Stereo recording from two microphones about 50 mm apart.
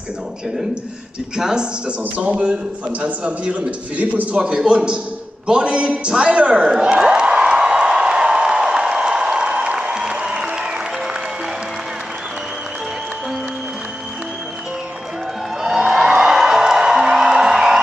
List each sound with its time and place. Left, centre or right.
1.3 s a man's voice: centre
5.5 s a sound: right
10.1 s music: centre
15.6 s music: centre